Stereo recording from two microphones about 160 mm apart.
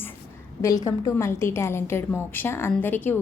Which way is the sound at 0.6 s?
20° left (ahead or behind).